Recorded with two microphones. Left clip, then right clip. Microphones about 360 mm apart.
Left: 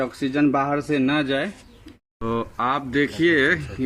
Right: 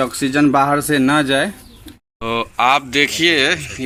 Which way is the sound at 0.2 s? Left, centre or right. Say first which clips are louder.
Right 7 dB; right.